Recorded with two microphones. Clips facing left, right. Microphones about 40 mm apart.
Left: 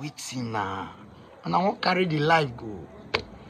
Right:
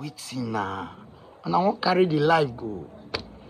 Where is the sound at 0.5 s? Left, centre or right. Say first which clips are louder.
Even; left.